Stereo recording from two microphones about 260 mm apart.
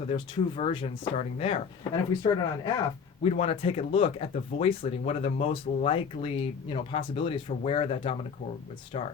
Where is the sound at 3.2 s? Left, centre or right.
Left.